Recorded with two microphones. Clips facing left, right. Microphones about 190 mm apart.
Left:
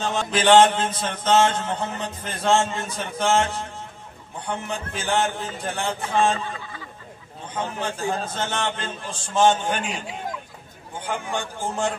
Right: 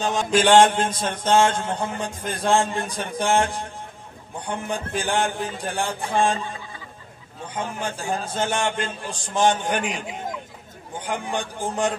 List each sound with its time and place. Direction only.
0.0 s mantra: 10° right (ahead or behind)
7.5 s mantra: 10° right (ahead or behind)